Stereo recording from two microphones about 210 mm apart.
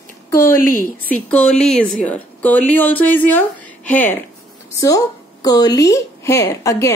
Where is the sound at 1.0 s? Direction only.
5° left (ahead or behind).